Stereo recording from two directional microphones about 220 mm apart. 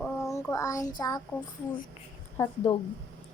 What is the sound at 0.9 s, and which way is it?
Speech, 15° left (ahead or behind).